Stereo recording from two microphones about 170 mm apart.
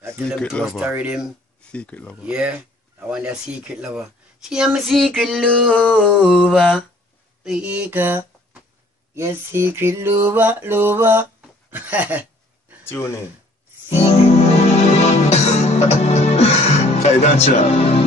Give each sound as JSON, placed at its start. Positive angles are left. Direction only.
{"t": 0.4, "sound": "speech", "side_deg": 5}
{"t": 1.7, "sound": "speech", "side_deg": 5}
{"t": 2.2, "sound": "speech", "side_deg": -5}
{"t": 7.4, "sound": "mantra", "side_deg": -5}
{"t": 11.7, "sound": "a sound", "side_deg": -10}
{"t": 12.8, "sound": "speech", "side_deg": 15}
{"t": 13.8, "sound": "music", "side_deg": 35}